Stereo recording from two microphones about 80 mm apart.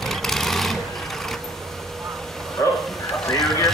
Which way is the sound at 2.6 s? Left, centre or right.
Left.